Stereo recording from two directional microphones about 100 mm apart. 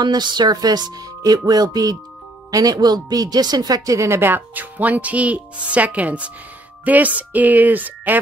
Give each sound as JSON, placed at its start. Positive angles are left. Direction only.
{"t": 0.0, "sound": "music", "side_deg": -45}
{"t": 2.5, "sound": "speech", "side_deg": -40}